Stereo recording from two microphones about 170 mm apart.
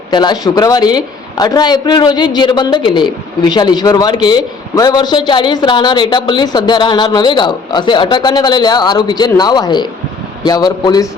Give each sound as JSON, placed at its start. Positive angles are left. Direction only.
{"t": 0.1, "sound": "a woman's voice", "side_deg": 25}